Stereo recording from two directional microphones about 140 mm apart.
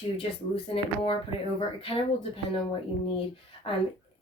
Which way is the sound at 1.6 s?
40° left (ahead or behind).